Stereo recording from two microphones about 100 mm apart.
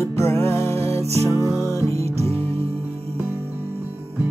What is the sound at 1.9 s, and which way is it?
Music, 90° right.